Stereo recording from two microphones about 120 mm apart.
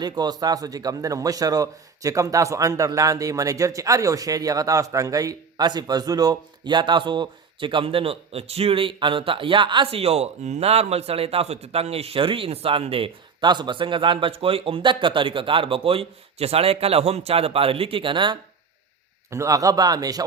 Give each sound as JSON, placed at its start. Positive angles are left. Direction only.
{"t": 0.0, "sound": "a man's voice", "side_deg": -35}
{"t": 19.3, "sound": "a man's voice", "side_deg": -25}